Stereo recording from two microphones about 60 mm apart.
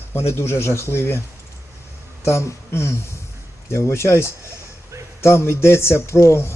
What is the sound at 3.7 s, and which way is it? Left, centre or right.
Speech, left.